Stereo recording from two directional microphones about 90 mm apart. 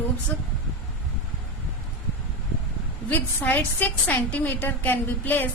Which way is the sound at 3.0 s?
20° left (ahead or behind).